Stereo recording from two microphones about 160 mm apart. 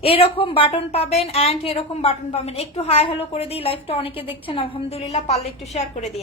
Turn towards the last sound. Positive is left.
turn(degrees=40)  # may be behind; listen again after turning